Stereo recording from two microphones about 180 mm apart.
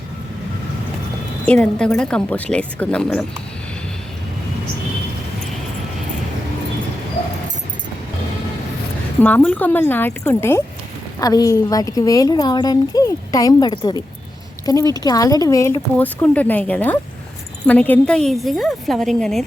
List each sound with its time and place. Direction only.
1.5 s speech: 5° left (ahead or behind)
9.2 s speech: 10° left (ahead or behind)